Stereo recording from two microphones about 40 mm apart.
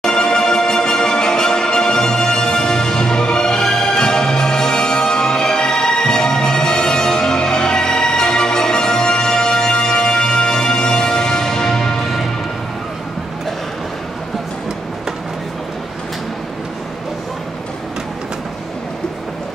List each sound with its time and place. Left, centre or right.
0.0 s music: centre